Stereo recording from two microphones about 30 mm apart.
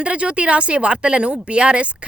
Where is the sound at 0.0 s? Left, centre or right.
Right.